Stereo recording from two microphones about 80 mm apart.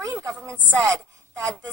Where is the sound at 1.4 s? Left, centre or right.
Right.